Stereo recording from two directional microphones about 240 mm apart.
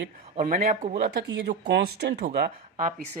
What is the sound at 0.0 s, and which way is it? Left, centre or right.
Speech, right.